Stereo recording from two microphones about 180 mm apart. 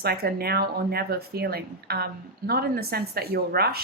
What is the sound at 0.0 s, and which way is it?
Speech, 60° right (ahead or behind).